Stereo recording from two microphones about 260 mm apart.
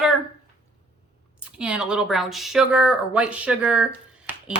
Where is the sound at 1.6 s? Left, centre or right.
Centre.